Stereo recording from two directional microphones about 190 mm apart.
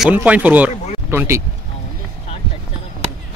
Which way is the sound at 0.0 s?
10° right (ahead or behind).